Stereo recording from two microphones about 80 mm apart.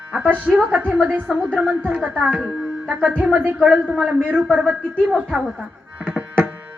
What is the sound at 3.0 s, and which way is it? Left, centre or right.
Speech, centre.